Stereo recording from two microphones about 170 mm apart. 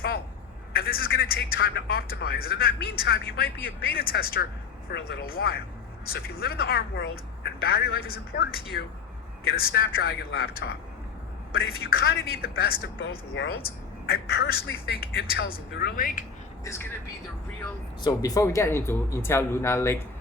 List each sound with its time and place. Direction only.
0.8 s a man's voice: 60° left (ahead or behind)
8.7 s a woman's voice: 75° left (ahead or behind)
9.5 s a woman's voice: 65° left (ahead or behind)
16.6 s speech: 15° left (ahead or behind)
18.0 s speech: 20° left (ahead or behind)